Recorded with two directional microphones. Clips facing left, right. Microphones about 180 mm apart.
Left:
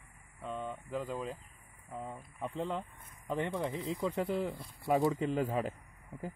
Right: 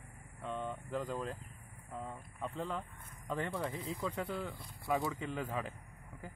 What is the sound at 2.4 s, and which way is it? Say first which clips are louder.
Speech: left 3 dB; 25° left (ahead or behind).